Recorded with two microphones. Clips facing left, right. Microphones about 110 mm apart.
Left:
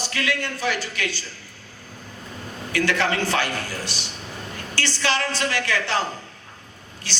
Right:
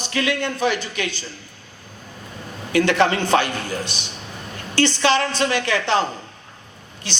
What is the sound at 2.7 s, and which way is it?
A man's voice, 20° right (ahead or behind).